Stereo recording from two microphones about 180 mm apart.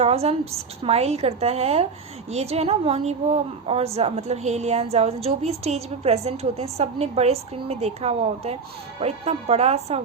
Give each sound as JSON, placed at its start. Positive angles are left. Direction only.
{"t": 0.0, "sound": "a woman's voice", "side_deg": -35}